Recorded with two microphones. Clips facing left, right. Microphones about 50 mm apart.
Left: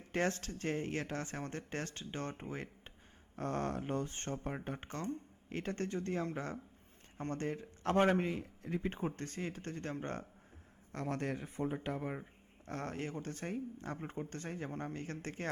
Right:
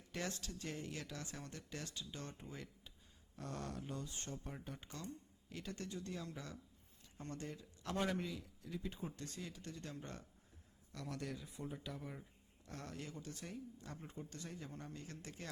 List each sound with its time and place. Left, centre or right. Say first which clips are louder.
0.0 s speech: left 10 dB; left